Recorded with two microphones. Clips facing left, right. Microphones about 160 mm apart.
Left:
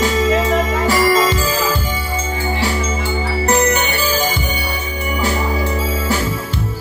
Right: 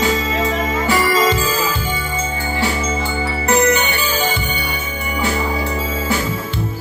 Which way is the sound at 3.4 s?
40° left (ahead or behind).